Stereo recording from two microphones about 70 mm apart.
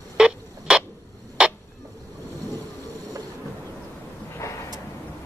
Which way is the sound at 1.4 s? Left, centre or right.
Centre.